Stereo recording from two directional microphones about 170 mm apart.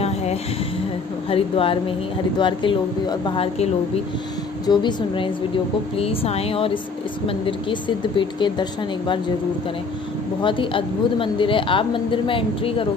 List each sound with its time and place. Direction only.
0.0 s a sound: 40° left (ahead or behind)
1.3 s a woman's voice: 30° left (ahead or behind)
4.6 s a woman's voice: 30° left (ahead or behind)
8.2 s speech: 30° left (ahead or behind)
10.4 s a woman's voice: 30° left (ahead or behind)